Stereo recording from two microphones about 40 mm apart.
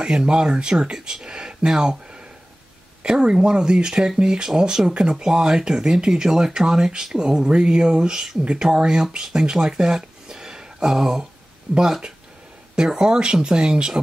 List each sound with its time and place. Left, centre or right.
0.0 s speech: right
11.7 s speech: right
12.7 s speech: centre